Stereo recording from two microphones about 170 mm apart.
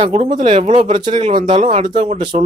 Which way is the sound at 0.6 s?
45° right (ahead or behind).